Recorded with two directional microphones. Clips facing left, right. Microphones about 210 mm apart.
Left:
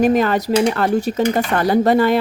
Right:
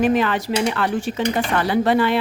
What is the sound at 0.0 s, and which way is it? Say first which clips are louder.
Speech: left 3 dB; 40° left (ahead or behind).